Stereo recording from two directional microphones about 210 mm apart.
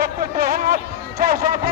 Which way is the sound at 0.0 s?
45° right (ahead or behind).